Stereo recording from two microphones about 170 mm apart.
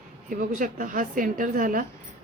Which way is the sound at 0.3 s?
55° right (ahead or behind).